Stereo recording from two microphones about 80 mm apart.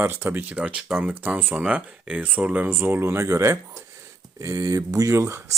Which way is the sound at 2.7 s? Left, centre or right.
Right.